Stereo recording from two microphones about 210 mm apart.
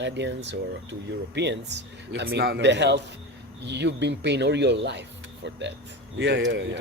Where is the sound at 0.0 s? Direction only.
55° right (ahead or behind).